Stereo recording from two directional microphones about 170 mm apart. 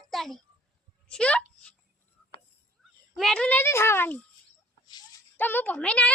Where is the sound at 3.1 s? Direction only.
5° left (ahead or behind).